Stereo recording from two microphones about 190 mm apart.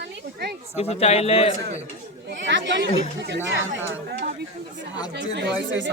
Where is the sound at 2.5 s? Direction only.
70° right (ahead or behind).